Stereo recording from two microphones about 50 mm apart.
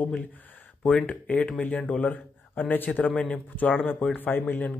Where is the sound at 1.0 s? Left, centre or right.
Left.